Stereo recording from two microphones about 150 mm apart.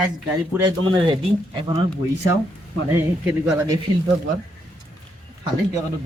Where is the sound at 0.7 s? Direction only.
35° right (ahead or behind).